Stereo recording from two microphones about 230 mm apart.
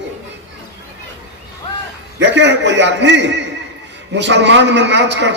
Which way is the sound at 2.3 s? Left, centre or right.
Right.